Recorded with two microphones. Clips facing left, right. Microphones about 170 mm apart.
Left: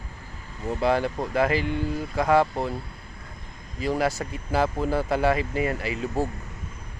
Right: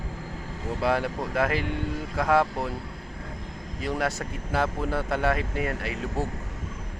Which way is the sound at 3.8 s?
Centre (ahead or behind).